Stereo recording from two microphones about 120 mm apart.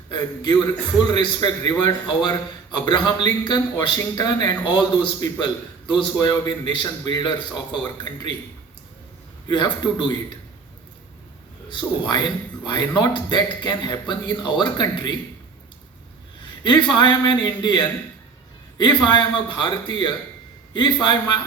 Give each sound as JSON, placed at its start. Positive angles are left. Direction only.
{"t": 0.1, "sound": "a man's voice", "side_deg": 40}
{"t": 9.5, "sound": "a man's voice", "side_deg": 40}
{"t": 11.7, "sound": "a man's voice", "side_deg": 40}
{"t": 16.6, "sound": "a man's voice", "side_deg": 40}